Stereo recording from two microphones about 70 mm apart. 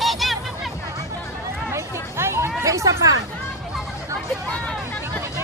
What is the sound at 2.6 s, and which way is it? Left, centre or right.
Speech, right.